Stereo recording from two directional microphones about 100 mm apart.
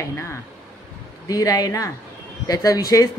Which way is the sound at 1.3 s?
35° left (ahead or behind).